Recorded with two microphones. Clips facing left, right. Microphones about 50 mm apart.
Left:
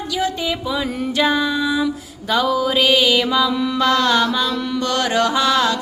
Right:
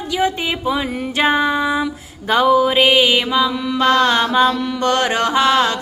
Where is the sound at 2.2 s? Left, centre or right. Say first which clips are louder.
Right 5 dB; right; by 3.6 s centre.